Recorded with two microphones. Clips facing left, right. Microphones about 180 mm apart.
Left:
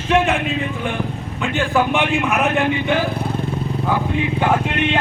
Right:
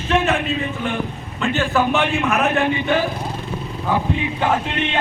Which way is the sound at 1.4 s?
15° left (ahead or behind).